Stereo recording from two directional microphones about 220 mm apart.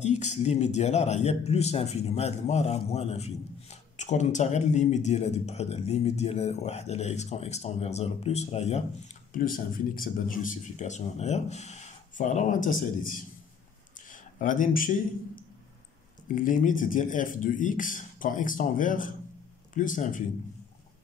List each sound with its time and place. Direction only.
0.0 s a man's voice: 30° left (ahead or behind)